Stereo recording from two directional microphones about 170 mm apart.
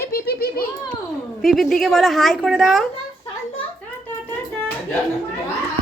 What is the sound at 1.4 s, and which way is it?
A woman's voice, centre (ahead or behind).